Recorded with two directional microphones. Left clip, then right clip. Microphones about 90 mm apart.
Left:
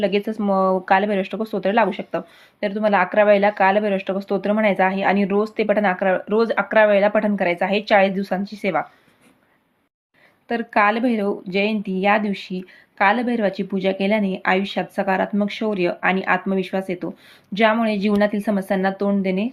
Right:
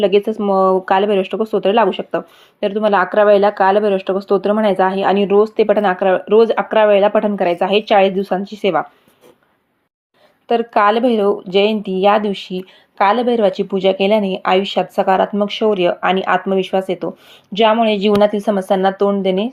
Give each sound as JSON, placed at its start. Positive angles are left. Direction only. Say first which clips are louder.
{"t": 0.0, "sound": "speech", "louder": "right 7 dB", "side_deg": -20}
{"t": 10.5, "sound": "speech", "louder": "right 5 dB", "side_deg": -25}